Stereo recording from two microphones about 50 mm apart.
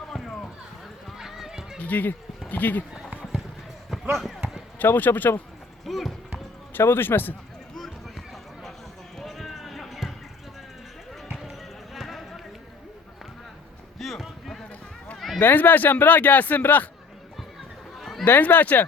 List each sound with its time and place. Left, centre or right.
0.1 s clip-clop: centre
1.2 s run: centre
1.8 s a man's voice: left
4.8 s a man's voice: left
5.8 s speech: centre
6.7 s a man's voice: left
9.1 s basketball bounce: centre
11.9 s basketball bounce: centre
14.0 s a sound: centre
15.4 s a man's voice: left
17.9 s a sound: centre
18.3 s a man's voice: left